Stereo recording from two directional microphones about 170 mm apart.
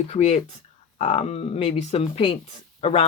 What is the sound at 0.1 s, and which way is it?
Speech, 40° left (ahead or behind).